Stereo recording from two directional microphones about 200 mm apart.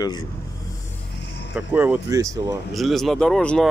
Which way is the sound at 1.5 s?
10° right (ahead or behind).